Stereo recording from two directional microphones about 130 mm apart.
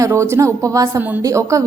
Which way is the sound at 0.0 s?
20° right (ahead or behind).